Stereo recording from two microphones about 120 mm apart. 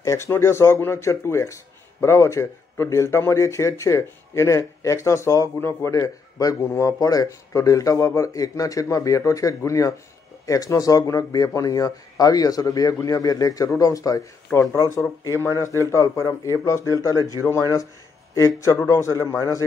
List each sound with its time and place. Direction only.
0.0 s speech: 25° left (ahead or behind)